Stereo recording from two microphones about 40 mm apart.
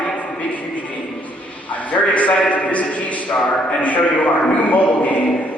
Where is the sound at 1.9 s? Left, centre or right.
Left.